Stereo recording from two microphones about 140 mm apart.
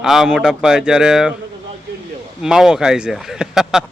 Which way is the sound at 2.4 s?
5° right (ahead or behind).